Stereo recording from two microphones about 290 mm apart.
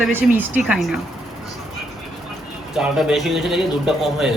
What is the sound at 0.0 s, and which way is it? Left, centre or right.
Speech, centre.